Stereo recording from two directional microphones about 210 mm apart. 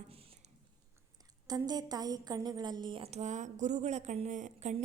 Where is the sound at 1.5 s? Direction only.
20° right (ahead or behind); by 4.7 s 35° right (ahead or behind).